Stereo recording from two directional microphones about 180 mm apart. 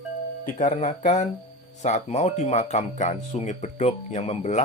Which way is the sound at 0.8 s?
40° left (ahead or behind).